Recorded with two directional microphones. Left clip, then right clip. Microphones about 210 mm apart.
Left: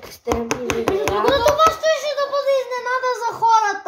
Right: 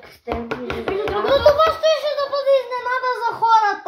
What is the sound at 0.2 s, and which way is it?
Hands, 50° left (ahead or behind).